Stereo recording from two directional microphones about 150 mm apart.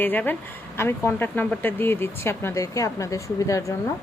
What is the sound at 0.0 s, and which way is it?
Speech, 10° left (ahead or behind).